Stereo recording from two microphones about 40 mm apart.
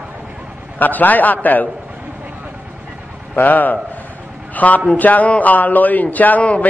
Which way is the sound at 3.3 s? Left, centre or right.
Left.